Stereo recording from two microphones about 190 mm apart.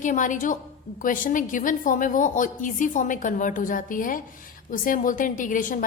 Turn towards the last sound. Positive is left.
turn(degrees=45)  # may be behind; listen again after turning